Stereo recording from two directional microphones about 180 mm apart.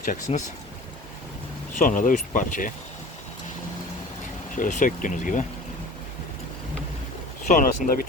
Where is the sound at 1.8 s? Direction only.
45° left (ahead or behind).